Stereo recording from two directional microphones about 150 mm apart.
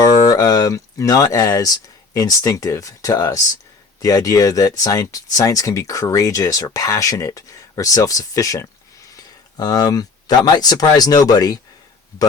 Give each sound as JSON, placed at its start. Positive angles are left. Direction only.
{"t": 0.0, "sound": "speech", "side_deg": 25}